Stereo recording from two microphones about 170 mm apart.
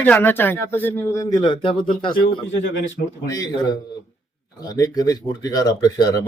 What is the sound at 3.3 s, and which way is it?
Speech, 20° left (ahead or behind).